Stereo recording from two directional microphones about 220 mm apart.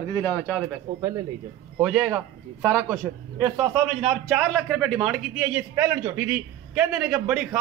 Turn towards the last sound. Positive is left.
turn(degrees=-5)  # may be behind; listen again after turning